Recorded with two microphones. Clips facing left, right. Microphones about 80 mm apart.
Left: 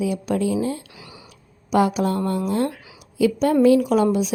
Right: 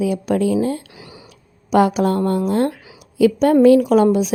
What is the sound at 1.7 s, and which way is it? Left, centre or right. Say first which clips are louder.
A woman's voice: right 4 dB; right.